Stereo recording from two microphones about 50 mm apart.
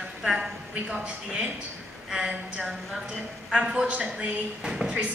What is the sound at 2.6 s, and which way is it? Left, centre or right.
Speech, centre.